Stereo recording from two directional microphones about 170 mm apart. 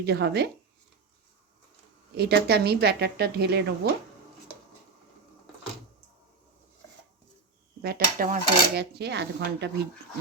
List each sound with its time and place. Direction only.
0.0 s dishes: 75° right (ahead or behind)
2.1 s dishes: 70° right (ahead or behind)
7.8 s dishes: 65° right (ahead or behind); by 9.7 s 80° right